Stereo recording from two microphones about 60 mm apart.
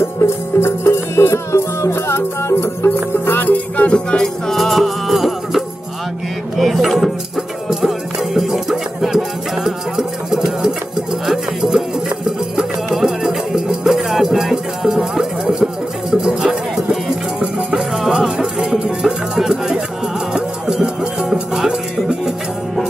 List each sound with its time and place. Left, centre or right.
0.2 s music: left
3.9 s music: centre
6.5 s a sound: centre
7.8 s music: centre
17.4 s music: centre
17.7 s music: centre